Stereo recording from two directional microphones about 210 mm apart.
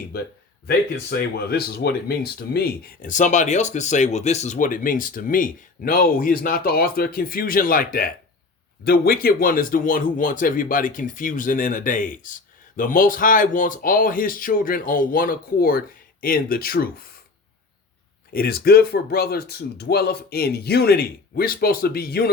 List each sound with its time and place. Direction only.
1.1 s speech: 50° left (ahead or behind)
18.3 s speech: 45° left (ahead or behind)